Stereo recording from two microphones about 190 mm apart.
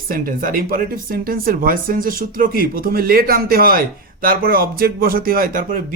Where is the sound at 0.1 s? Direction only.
50° right (ahead or behind).